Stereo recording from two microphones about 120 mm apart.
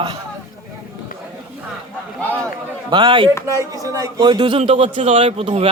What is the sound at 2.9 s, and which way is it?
Speech, 40° right (ahead or behind).